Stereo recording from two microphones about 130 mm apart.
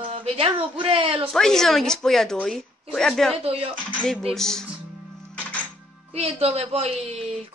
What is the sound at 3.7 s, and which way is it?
Speech, 5° left (ahead or behind).